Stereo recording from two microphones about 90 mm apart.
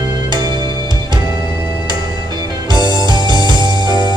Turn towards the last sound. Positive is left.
turn(degrees=-55)  # may be behind; listen again after turning